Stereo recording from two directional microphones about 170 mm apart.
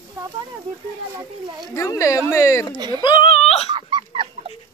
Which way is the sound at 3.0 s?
30° left (ahead or behind).